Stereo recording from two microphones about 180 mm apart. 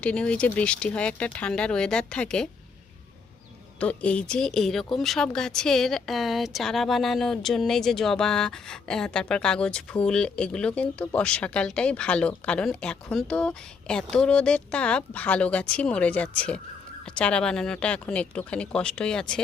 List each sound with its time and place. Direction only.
0.0 s speech: 5° left (ahead or behind)
3.8 s speech: 5° left (ahead or behind)